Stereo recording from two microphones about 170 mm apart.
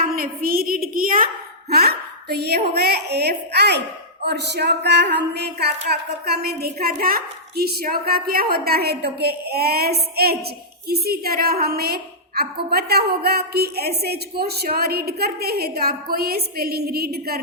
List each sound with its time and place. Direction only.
0.0 s a woman's voice: 60° right (ahead or behind)
1.7 s a woman's voice: 65° right (ahead or behind)